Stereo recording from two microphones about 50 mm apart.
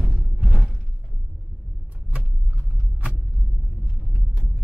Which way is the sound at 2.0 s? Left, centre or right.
Right.